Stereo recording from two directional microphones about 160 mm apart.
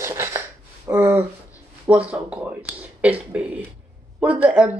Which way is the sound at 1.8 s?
10° right (ahead or behind).